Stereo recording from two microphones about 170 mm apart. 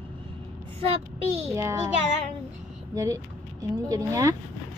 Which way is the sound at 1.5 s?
15° right (ahead or behind).